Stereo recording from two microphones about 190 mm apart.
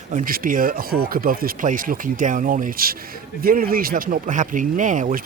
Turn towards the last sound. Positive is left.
turn(degrees=-40)  # may be behind; listen again after turning